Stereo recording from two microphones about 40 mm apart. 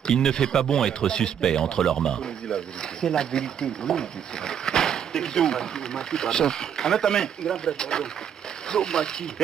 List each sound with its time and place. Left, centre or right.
0.0 s speech: centre